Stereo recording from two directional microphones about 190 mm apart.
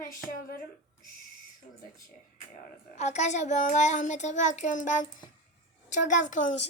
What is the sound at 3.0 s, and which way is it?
A child's voice, 35° left (ahead or behind).